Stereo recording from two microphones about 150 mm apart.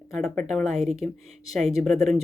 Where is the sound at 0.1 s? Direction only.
5° left (ahead or behind).